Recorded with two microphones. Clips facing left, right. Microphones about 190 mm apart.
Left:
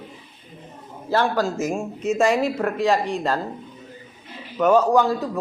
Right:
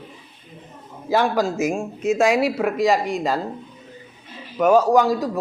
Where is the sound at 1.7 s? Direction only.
Centre (ahead or behind).